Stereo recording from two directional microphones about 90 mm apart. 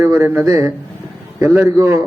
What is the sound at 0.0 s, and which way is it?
Speech, 30° right (ahead or behind).